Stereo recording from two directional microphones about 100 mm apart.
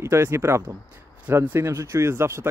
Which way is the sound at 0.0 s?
25° right (ahead or behind).